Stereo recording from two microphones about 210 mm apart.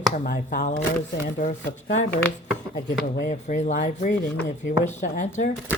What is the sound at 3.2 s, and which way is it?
Speech, 35° left (ahead or behind).